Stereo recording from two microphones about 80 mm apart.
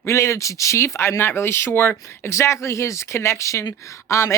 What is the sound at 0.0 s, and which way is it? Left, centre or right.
Speech, left.